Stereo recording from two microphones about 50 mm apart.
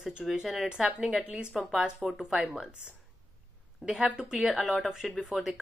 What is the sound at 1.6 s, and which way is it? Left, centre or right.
Speech, centre.